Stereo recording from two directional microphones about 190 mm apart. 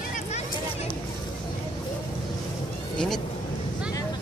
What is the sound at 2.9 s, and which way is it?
Speech, 5° left (ahead or behind).